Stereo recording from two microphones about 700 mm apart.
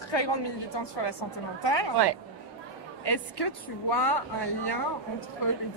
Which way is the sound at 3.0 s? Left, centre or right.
Left.